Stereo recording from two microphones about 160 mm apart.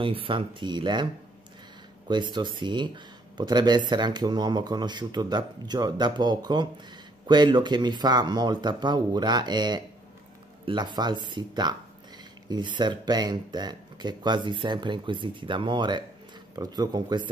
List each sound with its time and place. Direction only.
0.0 s speech: 35° right (ahead or behind)
2.0 s speech: 30° right (ahead or behind)